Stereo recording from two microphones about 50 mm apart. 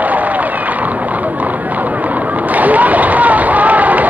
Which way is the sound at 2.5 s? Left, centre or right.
Right.